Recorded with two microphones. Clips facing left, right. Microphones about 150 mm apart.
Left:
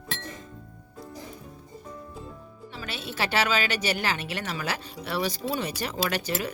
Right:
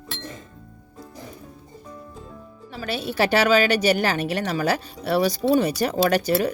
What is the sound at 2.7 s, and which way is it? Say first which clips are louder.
A woman's voice: right 9 dB; 40° right (ahead or behind).